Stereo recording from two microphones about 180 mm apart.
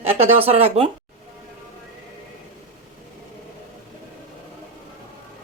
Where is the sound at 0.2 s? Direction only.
35° right (ahead or behind).